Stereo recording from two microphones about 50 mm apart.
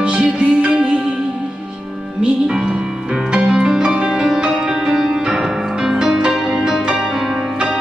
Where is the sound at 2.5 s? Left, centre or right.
Centre.